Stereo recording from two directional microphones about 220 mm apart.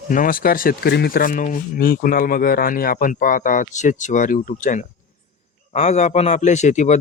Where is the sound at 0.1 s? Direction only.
40° left (ahead or behind).